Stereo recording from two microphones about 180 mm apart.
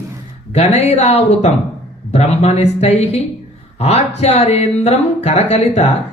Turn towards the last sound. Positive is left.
turn(degrees=35)  # may be behind; listen again after turning